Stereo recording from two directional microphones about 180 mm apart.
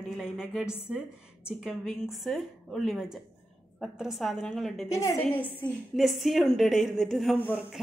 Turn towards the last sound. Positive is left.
turn(degrees=5)  # may be behind; listen again after turning